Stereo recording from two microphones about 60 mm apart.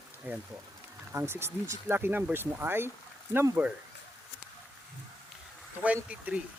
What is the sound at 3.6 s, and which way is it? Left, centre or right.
Speech, right.